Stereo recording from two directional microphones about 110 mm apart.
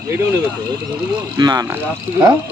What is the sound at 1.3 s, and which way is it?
Speech, 35° right (ahead or behind).